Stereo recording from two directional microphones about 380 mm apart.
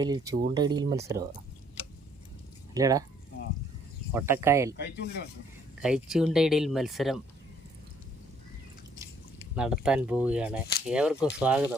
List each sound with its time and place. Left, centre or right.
0.0 s speech: centre
2.7 s speech: centre
4.1 s speech: centre
4.8 s speech: left
5.8 s speech: centre
9.6 s speech: centre